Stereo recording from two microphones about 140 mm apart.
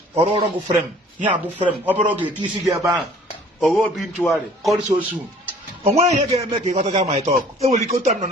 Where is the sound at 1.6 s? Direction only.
10° right (ahead or behind).